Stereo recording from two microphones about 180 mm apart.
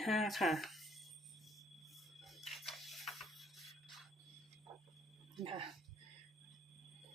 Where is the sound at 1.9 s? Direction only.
Centre (ahead or behind).